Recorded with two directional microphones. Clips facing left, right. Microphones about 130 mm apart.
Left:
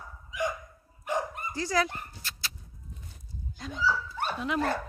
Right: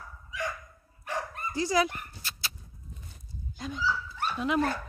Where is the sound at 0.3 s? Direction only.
20° left (ahead or behind).